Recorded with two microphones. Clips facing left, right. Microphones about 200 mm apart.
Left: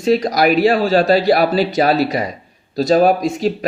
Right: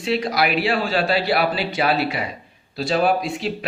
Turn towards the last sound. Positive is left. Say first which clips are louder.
# left 6 dB
turn(degrees=45)  # may be behind; listen again after turning